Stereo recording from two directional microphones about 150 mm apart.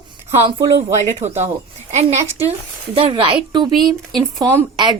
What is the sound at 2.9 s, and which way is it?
Speech, 35° right (ahead or behind).